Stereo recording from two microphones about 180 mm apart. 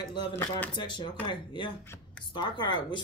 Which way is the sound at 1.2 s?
25° left (ahead or behind).